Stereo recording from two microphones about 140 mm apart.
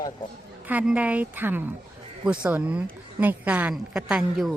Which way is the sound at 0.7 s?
10° right (ahead or behind).